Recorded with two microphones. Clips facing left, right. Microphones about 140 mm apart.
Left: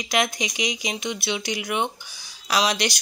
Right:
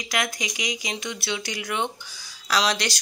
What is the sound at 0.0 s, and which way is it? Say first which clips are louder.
Speech: left 4 dB; 20° left (ahead or behind).